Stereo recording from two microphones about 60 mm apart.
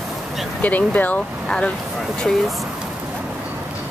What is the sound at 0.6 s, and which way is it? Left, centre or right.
Speech, left.